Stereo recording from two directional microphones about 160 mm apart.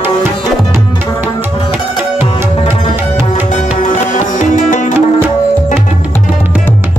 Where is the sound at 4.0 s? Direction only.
50° left (ahead or behind).